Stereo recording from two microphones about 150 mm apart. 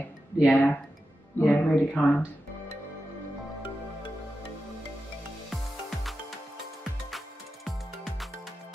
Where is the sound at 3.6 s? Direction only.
35° left (ahead or behind).